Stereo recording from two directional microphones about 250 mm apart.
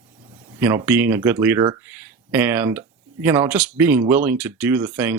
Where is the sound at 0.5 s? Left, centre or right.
Centre.